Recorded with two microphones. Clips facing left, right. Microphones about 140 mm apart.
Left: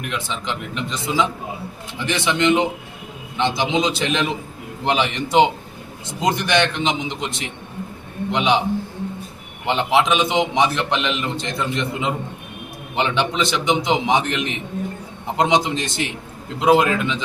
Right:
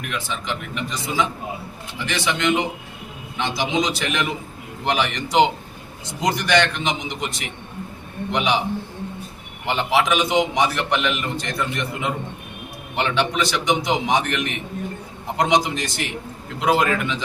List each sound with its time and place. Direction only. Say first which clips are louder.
0.1 s a man's voice: even; 20° left (ahead or behind)
2.0 s a man's voice: left 3 dB; 20° left (ahead or behind)
9.6 s a man's voice: left 2 dB; 20° left (ahead or behind)